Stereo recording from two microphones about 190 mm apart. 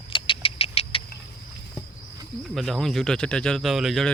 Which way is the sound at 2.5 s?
Centre (ahead or behind).